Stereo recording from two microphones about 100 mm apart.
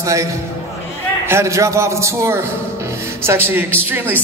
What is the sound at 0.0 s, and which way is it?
A man's voice, 30° right (ahead or behind).